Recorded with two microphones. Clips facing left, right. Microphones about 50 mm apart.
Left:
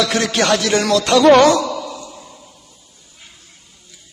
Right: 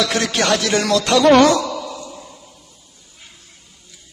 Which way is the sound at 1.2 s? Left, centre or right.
Centre.